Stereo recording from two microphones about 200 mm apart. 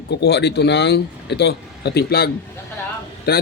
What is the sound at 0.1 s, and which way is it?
A man's voice, 55° left (ahead or behind).